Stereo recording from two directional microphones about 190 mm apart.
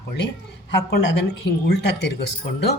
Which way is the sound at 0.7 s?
60° left (ahead or behind).